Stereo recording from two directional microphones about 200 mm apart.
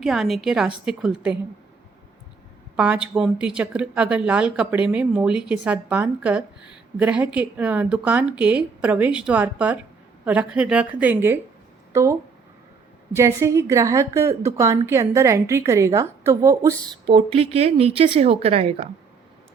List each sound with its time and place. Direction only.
0.0 s speech: centre (ahead or behind)
2.7 s a woman's voice: 5° right (ahead or behind)
13.1 s a woman's voice: 15° right (ahead or behind)
17.1 s speech: 30° right (ahead or behind)